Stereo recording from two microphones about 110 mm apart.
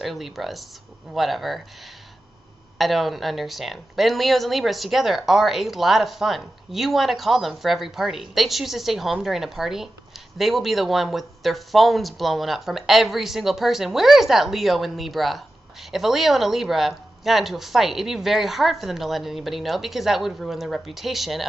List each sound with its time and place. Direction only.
0.0 s speech: centre (ahead or behind)
2.8 s speech: centre (ahead or behind)